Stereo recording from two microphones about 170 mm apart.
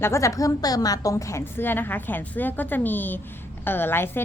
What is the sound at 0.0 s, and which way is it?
Speech, 15° left (ahead or behind).